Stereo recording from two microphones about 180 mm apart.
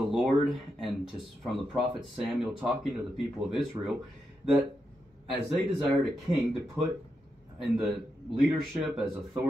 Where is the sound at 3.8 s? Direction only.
20° right (ahead or behind).